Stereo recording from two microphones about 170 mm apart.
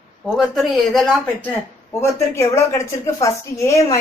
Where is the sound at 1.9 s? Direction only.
15° left (ahead or behind).